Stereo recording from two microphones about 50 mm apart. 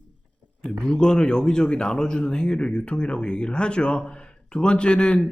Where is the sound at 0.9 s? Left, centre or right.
Centre.